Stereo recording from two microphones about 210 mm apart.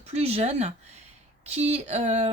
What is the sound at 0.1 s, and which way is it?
Speech, 30° right (ahead or behind).